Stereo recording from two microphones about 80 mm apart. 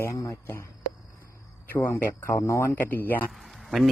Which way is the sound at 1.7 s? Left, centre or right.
Left.